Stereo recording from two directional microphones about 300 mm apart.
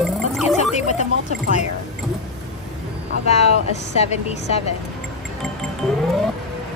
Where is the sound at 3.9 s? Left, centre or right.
Left.